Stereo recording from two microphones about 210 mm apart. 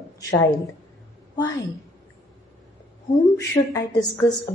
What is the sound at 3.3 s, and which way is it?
Speech, 15° left (ahead or behind).